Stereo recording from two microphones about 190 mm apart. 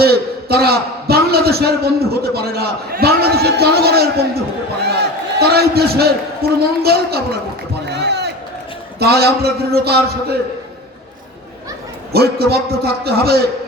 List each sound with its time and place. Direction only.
0.0 s a man's voice: 55° right (ahead or behind)
7.9 s a sound: 60° right (ahead or behind)
9.0 s a man's voice: 55° right (ahead or behind)
12.1 s a man's voice: 55° right (ahead or behind)